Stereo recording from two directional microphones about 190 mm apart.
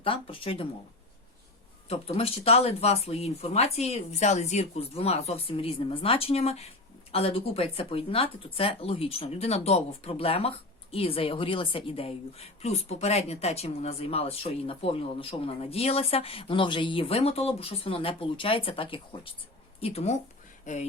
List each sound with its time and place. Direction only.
0.0 s speech: 30° left (ahead or behind)
2.1 s a woman's voice: 30° left (ahead or behind)